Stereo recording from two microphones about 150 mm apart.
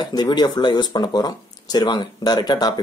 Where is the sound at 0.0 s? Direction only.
30° left (ahead or behind).